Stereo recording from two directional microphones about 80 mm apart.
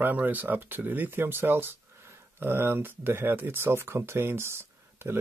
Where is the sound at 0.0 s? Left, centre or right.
Right.